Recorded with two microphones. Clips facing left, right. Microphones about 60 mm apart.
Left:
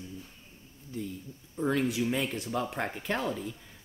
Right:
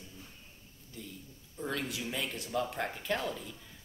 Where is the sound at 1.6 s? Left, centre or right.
Left.